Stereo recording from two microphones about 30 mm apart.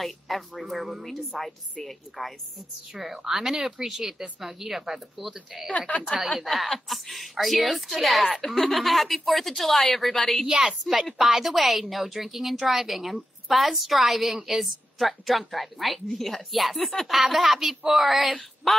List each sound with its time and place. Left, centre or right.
0.0 s a woman's voice: centre
1.4 s a woman's voice: centre
2.9 s speech: centre
3.5 s speech: right
5.7 s speech: left
6.4 s a woman's voice: centre
10.7 s a woman's voice: centre